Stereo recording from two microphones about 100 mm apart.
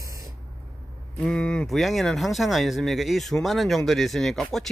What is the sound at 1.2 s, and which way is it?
Speech, 10° left (ahead or behind).